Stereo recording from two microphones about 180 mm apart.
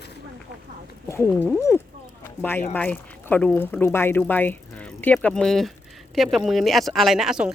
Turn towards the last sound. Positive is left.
turn(degrees=-5)  # may be behind; listen again after turning